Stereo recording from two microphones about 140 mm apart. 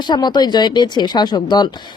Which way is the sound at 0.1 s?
30° left (ahead or behind).